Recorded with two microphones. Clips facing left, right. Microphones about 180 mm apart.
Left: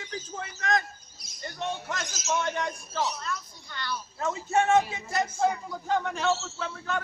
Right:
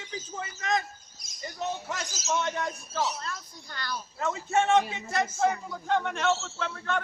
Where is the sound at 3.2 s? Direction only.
40° right (ahead or behind).